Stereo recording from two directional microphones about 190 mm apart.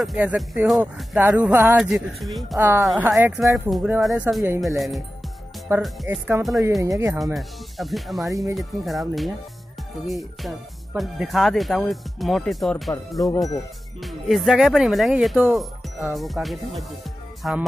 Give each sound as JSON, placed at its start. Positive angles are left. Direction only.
{"t": 0.0, "sound": "speech", "side_deg": -5}
{"t": 2.6, "sound": "speech", "side_deg": -15}
{"t": 2.9, "sound": "speech", "side_deg": 0}
{"t": 3.2, "sound": "speech", "side_deg": -10}
{"t": 5.7, "sound": "speech", "side_deg": -15}
{"t": 6.8, "sound": "speech", "side_deg": -15}
{"t": 7.3, "sound": "speech", "side_deg": 0}
{"t": 10.0, "sound": "speech", "side_deg": 0}
{"t": 13.2, "sound": "speech", "side_deg": 15}
{"t": 14.0, "sound": "speech", "side_deg": 0}
{"t": 17.4, "sound": "music", "side_deg": 0}